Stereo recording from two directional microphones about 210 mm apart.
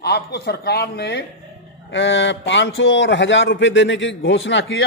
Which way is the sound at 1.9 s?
60° left (ahead or behind).